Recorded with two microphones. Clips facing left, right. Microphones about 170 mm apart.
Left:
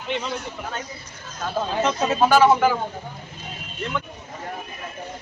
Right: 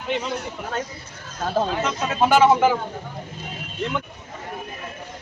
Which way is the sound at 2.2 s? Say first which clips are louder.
Right 1 dB; 20° right (ahead or behind).